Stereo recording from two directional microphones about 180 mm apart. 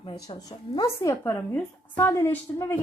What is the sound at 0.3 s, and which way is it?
A woman's voice, 20° left (ahead or behind).